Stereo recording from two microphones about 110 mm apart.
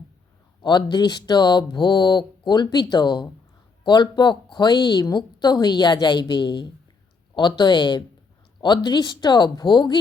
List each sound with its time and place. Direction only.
0.6 s a woman's voice: 45° left (ahead or behind)